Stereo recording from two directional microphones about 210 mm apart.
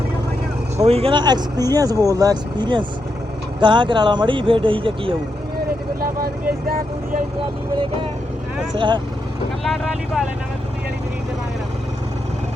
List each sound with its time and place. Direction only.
0.9 s speech: 30° right (ahead or behind)
6.0 s speech: 45° right (ahead or behind)
8.7 s speech: 25° right (ahead or behind)
9.6 s speech: centre (ahead or behind)